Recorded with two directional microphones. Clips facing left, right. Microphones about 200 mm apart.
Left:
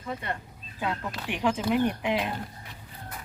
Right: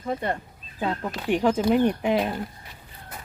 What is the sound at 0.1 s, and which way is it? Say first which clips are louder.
Speech: right 6 dB; 35° right (ahead or behind).